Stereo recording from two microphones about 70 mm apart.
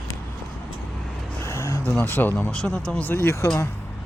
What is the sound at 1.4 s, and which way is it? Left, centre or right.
Vehicle, left.